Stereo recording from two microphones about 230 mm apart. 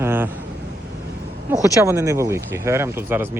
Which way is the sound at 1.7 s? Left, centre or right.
Centre.